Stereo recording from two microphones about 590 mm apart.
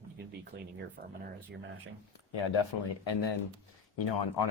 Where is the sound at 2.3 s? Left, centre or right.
Left.